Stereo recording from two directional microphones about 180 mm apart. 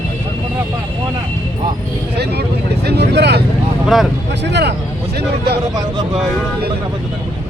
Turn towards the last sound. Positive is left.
turn(degrees=-65)  # may be behind; listen again after turning